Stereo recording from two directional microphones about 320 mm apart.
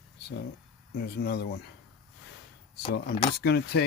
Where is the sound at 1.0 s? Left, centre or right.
Left.